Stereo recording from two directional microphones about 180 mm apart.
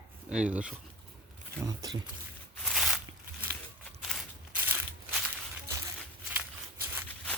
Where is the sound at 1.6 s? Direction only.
20° right (ahead or behind).